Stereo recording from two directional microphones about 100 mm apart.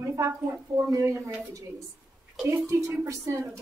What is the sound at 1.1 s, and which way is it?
Speech, 20° right (ahead or behind).